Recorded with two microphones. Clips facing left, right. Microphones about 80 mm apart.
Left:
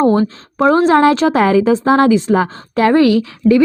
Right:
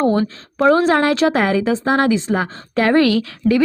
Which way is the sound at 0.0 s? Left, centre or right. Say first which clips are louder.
Left 4 dB; left.